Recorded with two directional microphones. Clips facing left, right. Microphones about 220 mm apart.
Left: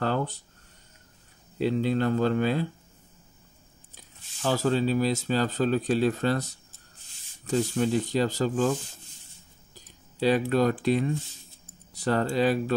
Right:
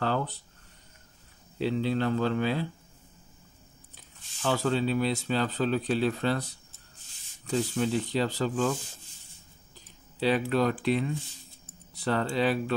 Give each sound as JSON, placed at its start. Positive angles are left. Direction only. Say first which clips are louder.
{"t": 0.0, "sound": "a sound", "louder": "left 2 dB", "side_deg": 45}
{"t": 1.6, "sound": "speech", "louder": "left 3 dB", "side_deg": 45}
{"t": 3.9, "sound": "speech", "louder": "left 1 dB", "side_deg": 40}
{"t": 10.5, "sound": "speech", "louder": "left 2 dB", "side_deg": 45}